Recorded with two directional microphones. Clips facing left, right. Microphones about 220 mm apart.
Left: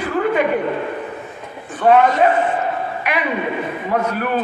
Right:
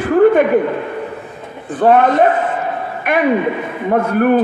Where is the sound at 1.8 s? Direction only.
50° right (ahead or behind).